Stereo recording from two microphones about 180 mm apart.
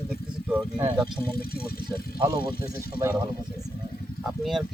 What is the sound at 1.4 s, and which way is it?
Speech, 60° left (ahead or behind).